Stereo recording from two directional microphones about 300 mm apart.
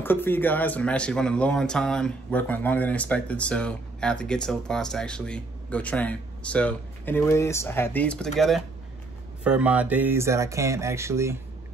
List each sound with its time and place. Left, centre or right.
0.0 s speech: centre